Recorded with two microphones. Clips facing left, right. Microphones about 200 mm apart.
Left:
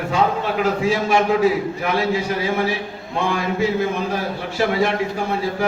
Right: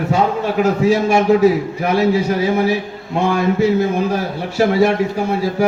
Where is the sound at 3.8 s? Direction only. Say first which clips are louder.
Right 4 dB; 40° right (ahead or behind).